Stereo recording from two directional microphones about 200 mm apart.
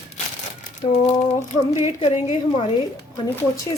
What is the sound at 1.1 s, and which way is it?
A woman's voice, 30° left (ahead or behind).